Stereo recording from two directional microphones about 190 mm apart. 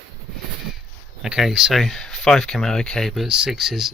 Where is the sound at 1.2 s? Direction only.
Centre (ahead or behind).